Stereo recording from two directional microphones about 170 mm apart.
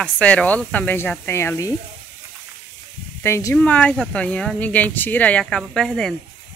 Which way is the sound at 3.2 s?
15° left (ahead or behind).